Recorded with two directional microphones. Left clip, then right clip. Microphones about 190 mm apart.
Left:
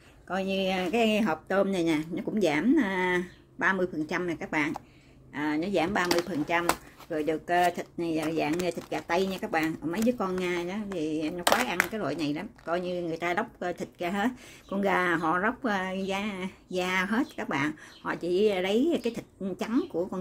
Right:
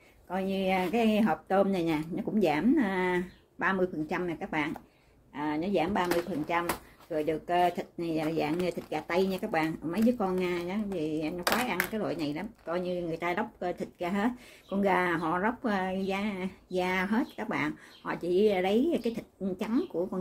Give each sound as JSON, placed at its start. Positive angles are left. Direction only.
{"t": 0.3, "sound": "speech", "side_deg": 20}